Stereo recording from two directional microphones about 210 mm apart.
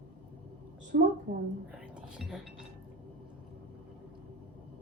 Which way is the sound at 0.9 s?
50° right (ahead or behind).